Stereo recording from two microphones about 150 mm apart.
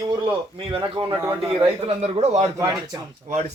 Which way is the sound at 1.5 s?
35° right (ahead or behind).